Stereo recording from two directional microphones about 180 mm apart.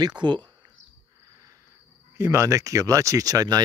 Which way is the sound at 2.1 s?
15° right (ahead or behind).